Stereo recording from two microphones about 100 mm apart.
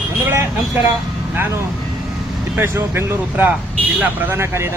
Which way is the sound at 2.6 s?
25° right (ahead or behind).